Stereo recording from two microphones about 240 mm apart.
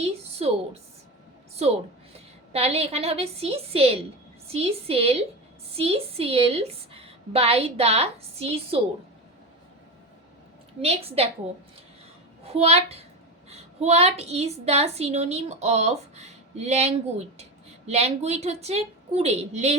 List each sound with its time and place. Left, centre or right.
0.0 s a woman's voice: right
2.1 s a woman's voice: right
10.8 s a woman's voice: right
12.5 s a woman's voice: right